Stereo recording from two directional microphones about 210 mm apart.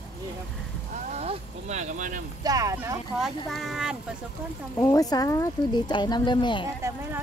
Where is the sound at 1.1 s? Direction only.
30° right (ahead or behind).